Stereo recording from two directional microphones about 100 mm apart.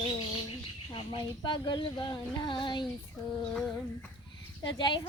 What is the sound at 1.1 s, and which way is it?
Speech, 50° left (ahead or behind).